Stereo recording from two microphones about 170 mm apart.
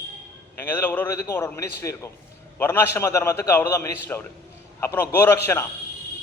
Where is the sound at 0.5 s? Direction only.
15° left (ahead or behind).